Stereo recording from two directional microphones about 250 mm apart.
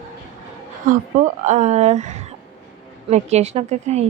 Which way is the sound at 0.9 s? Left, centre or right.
Right.